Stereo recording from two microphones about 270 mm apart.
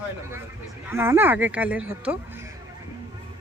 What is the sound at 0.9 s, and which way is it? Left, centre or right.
Speech, centre.